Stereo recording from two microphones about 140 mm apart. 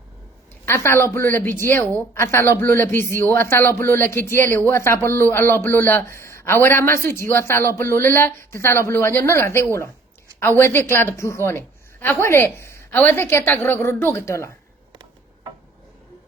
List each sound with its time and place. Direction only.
0.6 s a woman's voice: 20° left (ahead or behind)